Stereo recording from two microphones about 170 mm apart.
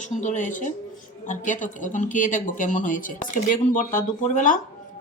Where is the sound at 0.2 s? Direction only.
45° left (ahead or behind).